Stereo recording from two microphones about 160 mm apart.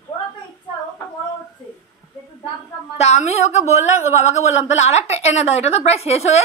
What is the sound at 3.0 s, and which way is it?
A woman's voice, 45° left (ahead or behind).